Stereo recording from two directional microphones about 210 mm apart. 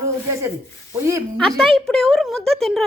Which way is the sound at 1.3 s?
5° left (ahead or behind).